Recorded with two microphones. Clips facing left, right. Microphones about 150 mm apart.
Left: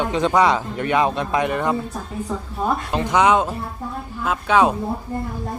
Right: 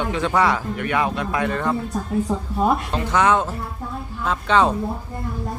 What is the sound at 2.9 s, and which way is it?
Speech, 15° left (ahead or behind).